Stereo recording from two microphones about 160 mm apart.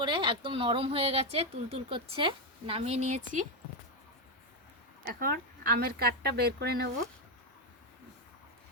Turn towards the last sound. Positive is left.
turn(degrees=-80)